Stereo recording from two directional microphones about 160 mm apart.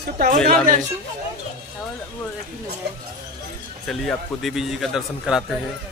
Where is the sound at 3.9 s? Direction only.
Centre (ahead or behind).